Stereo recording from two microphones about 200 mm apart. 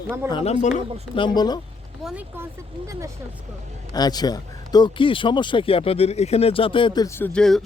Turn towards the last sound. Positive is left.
turn(degrees=5)  # may be behind; listen again after turning